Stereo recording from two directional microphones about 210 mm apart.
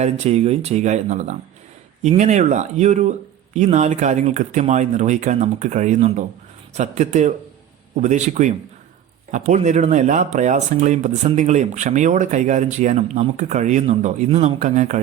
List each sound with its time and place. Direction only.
0.0 s speech: 30° right (ahead or behind)